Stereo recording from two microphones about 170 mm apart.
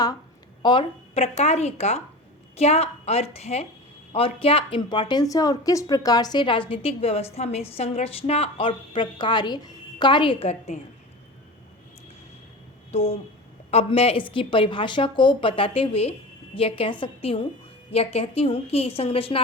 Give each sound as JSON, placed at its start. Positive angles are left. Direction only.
{"t": 0.6, "sound": "a woman's voice", "side_deg": 30}
{"t": 12.9, "sound": "a woman's voice", "side_deg": 35}